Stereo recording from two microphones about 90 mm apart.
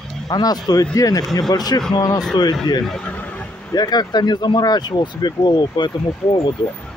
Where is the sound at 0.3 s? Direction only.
45° left (ahead or behind).